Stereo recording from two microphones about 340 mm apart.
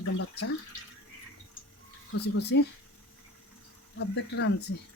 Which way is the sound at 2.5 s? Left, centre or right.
Left.